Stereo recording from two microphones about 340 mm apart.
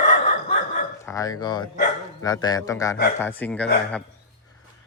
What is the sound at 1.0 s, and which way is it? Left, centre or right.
A man's voice, centre.